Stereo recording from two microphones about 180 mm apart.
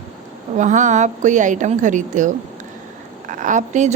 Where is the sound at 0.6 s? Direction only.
45° right (ahead or behind).